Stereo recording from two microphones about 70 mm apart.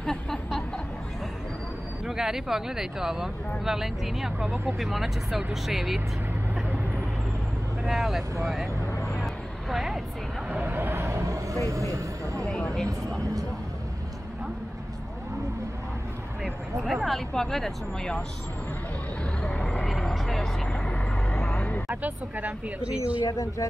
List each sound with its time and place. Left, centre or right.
0.0 s a sound: centre
2.0 s speech: centre
7.8 s speech: centre
9.1 s vehicle: centre
10.5 s vehicle: right
12.4 s a sound: centre
13.2 s music: right
16.4 s speech: centre
19.4 s vehicle: centre
21.8 s speech: right
23.2 s speech: left